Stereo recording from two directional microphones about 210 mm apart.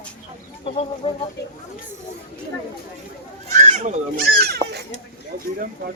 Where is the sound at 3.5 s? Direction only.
35° right (ahead or behind).